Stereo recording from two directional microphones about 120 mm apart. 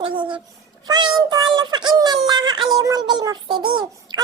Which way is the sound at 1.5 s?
35° right (ahead or behind).